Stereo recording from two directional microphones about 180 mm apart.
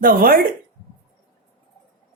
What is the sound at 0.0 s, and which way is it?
Speech, 50° right (ahead or behind).